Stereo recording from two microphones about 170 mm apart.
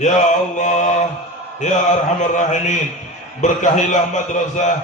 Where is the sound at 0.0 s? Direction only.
45° left (ahead or behind).